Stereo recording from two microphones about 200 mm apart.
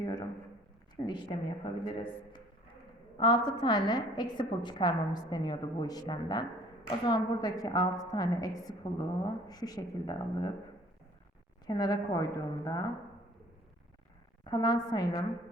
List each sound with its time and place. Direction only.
0.0 s a sound: 20° left (ahead or behind)
1.0 s a woman's voice: 20° left (ahead or behind)
3.2 s a woman's voice: 25° left (ahead or behind)
11.6 s a woman's voice: 20° left (ahead or behind)
14.4 s a woman's voice: 20° left (ahead or behind)